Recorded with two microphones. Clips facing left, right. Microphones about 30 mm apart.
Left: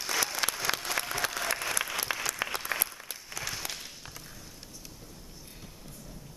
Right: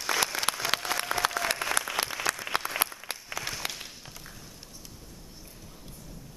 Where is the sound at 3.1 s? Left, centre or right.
Right.